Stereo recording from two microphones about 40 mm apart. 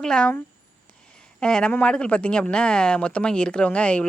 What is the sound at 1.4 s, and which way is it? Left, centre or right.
Speech, left.